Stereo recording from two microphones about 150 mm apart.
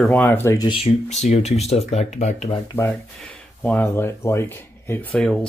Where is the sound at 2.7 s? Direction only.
15° left (ahead or behind).